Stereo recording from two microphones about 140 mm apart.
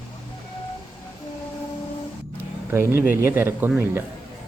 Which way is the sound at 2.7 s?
15° right (ahead or behind).